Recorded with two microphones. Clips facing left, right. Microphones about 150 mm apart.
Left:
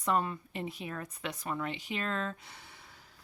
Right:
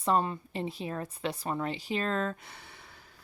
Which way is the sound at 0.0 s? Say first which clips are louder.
Right 3 dB; 30° right (ahead or behind).